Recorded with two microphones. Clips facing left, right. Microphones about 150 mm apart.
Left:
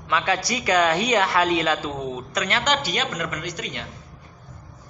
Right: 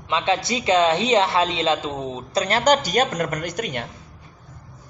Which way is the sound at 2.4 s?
40° right (ahead or behind).